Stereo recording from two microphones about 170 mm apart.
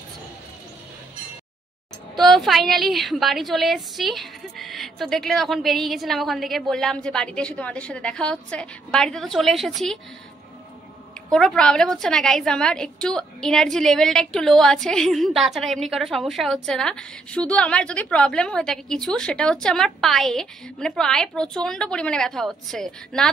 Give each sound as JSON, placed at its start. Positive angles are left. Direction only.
{"t": 2.1, "sound": "a woman's voice", "side_deg": 0}
{"t": 11.3, "sound": "a woman's voice", "side_deg": 5}